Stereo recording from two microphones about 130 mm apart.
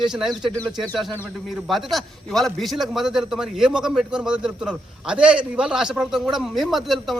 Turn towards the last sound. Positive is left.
turn(degrees=0)  # may be behind; listen again after turning